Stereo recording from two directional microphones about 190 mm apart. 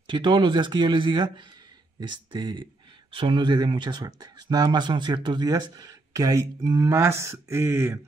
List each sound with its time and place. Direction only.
0.0 s speech: 25° right (ahead or behind)